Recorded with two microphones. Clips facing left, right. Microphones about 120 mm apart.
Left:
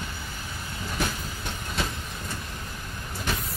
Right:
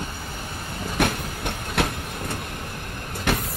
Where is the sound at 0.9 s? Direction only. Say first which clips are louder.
Right 7 dB; 65° right (ahead or behind).